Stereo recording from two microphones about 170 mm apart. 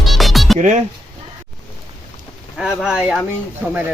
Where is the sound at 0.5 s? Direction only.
45° right (ahead or behind).